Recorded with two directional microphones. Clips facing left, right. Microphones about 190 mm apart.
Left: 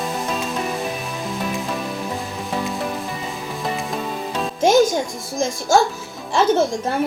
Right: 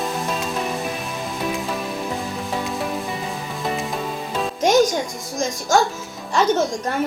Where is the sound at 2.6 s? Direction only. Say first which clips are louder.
Left 1 dB; centre (ahead or behind).